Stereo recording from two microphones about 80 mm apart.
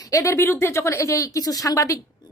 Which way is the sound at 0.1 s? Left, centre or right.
Left.